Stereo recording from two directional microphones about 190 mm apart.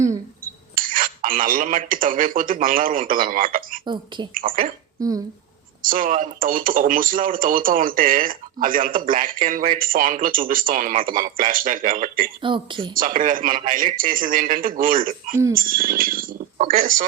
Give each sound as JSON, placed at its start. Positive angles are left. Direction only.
{"t": 0.4, "sound": "speech", "side_deg": -45}
{"t": 4.9, "sound": "speech", "side_deg": -20}
{"t": 5.8, "sound": "speech", "side_deg": -45}
{"t": 12.4, "sound": "a woman's voice", "side_deg": -25}
{"t": 12.9, "sound": "speech", "side_deg": -45}